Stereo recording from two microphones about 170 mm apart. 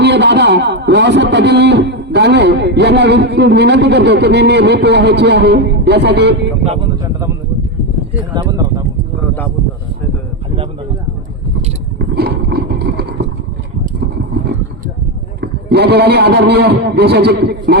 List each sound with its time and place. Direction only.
0.0 s a man's voice: 85° right
8.3 s speech: 25° right (ahead or behind)
11.9 s a sound: 70° right (ahead or behind)
15.4 s a man's voice: 70° right (ahead or behind)